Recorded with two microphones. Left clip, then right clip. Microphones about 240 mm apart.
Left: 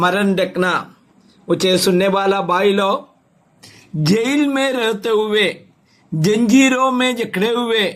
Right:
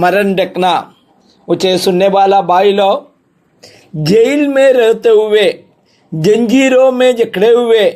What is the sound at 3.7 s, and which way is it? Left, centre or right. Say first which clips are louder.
A man's voice: right 7 dB; centre.